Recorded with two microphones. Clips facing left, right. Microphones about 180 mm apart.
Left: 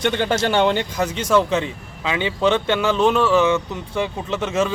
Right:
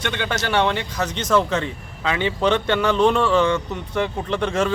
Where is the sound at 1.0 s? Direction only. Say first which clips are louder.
Even; 10° left (ahead or behind).